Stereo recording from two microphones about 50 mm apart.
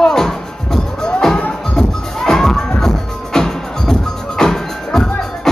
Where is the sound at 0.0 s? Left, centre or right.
Centre.